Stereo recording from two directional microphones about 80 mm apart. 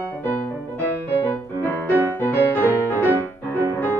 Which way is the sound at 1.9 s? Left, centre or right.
Right.